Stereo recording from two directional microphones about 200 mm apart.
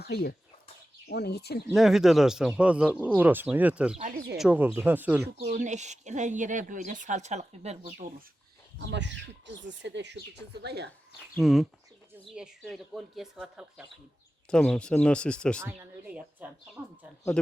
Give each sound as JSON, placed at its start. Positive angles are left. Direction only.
{"t": 0.0, "sound": "speech", "side_deg": 55}
{"t": 1.7, "sound": "speech", "side_deg": 0}
{"t": 3.9, "sound": "speech", "side_deg": -40}
{"t": 4.4, "sound": "speech", "side_deg": -5}
{"t": 5.2, "sound": "speech", "side_deg": -60}
{"t": 5.5, "sound": "speech", "side_deg": -35}
{"t": 8.8, "sound": "speech", "side_deg": -60}
{"t": 11.2, "sound": "speech", "side_deg": 0}
{"t": 15.6, "sound": "speech", "side_deg": -10}